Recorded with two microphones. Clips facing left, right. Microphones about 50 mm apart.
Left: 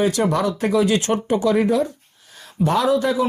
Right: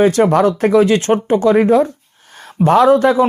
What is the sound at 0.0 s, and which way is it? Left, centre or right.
Speech, right.